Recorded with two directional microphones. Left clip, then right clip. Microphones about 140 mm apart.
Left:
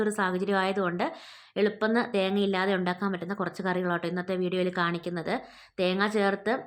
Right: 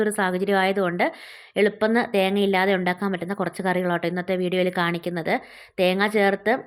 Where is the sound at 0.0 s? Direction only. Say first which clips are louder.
Right 5 dB; 30° right (ahead or behind).